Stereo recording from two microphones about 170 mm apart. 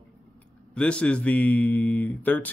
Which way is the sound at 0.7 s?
5° left (ahead or behind).